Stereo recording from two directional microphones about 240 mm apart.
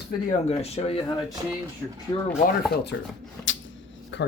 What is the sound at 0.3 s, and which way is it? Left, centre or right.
Speech, left.